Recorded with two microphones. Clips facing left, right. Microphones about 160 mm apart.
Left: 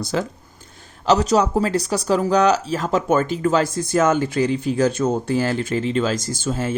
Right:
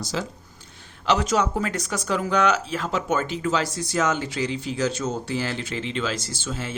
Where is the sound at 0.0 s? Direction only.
55° left (ahead or behind).